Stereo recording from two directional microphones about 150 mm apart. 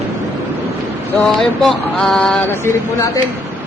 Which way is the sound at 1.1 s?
5° left (ahead or behind).